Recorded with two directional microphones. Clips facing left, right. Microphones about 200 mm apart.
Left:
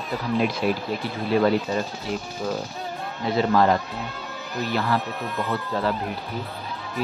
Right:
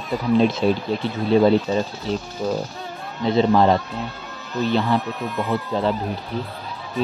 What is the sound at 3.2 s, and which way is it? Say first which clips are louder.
Speech: right 4 dB; 25° right (ahead or behind).